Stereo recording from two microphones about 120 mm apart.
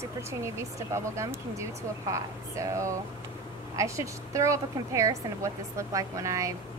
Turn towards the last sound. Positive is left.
turn(degrees=-25)  # may be behind; listen again after turning